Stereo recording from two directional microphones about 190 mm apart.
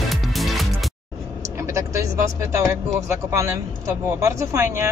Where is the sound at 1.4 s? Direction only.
15° right (ahead or behind).